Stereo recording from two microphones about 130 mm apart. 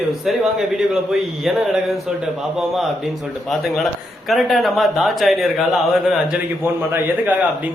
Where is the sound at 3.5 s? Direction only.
Centre (ahead or behind).